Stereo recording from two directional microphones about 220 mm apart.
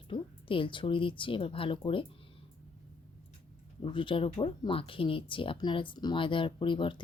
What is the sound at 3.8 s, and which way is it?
Speech, 20° left (ahead or behind).